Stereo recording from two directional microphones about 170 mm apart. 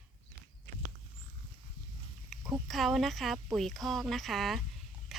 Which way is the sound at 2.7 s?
Centre (ahead or behind).